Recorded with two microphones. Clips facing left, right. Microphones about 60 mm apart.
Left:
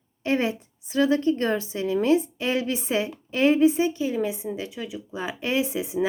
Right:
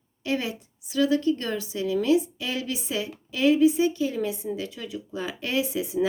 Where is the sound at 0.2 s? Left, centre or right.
Left.